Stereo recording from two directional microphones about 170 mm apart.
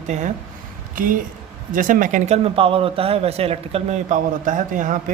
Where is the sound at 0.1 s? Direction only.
45° right (ahead or behind).